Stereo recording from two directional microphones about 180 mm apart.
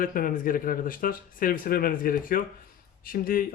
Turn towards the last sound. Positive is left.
turn(degrees=50)  # may be behind; listen again after turning